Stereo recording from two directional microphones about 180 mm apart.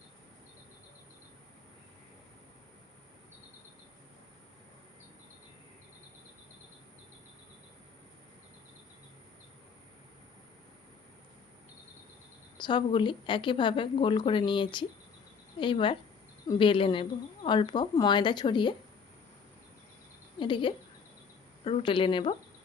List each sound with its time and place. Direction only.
12.5 s a woman's voice: 25° left (ahead or behind)
20.4 s a woman's voice: 25° left (ahead or behind)